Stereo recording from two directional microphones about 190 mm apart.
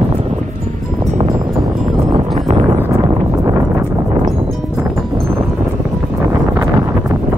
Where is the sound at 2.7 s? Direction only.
15° right (ahead or behind).